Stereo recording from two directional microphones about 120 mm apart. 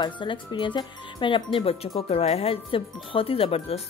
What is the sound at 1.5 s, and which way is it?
A woman's voice, 55° left (ahead or behind).